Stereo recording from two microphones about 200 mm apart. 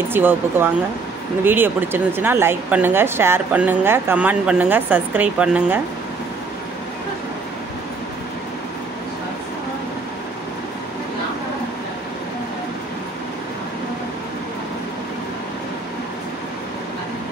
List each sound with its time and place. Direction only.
0.1 s speech: 10° right (ahead or behind)